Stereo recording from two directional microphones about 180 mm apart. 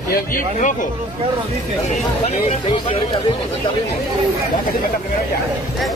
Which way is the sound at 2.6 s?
30° left (ahead or behind).